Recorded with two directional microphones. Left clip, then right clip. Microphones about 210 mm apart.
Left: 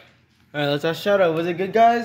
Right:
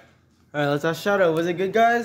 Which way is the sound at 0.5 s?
Centre (ahead or behind).